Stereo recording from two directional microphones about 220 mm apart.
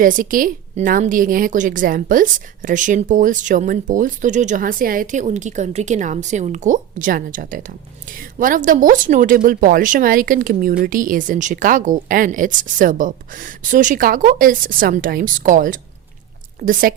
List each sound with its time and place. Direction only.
0.0 s a woman's voice: 40° right (ahead or behind)